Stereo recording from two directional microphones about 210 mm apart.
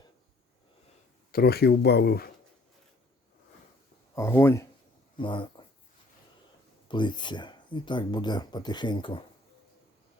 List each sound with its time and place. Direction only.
1.3 s speech: 45° left (ahead or behind)
4.1 s speech: 15° left (ahead or behind)
5.2 s speech: 20° left (ahead or behind)
6.8 s speech: 20° left (ahead or behind)